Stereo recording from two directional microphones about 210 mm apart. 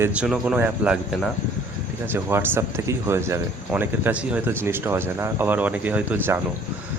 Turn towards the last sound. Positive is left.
turn(degrees=-5)  # may be behind; listen again after turning